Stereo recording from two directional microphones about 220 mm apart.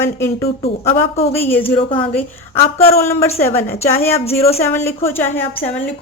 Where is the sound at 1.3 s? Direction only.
10° left (ahead or behind).